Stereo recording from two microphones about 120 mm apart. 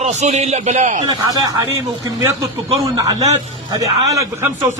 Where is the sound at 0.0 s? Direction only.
70° right (ahead or behind).